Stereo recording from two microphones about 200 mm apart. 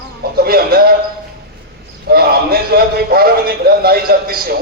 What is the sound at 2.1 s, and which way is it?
A man's voice, 50° right (ahead or behind).